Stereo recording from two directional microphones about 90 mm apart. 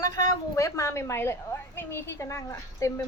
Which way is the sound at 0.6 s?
30° left (ahead or behind).